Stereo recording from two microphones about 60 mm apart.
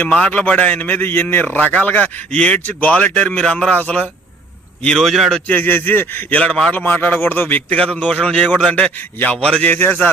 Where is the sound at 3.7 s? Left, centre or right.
Left.